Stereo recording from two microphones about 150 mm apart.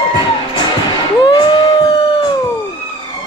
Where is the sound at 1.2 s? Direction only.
30° left (ahead or behind).